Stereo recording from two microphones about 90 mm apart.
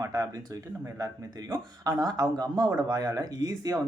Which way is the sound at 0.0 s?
40° right (ahead or behind).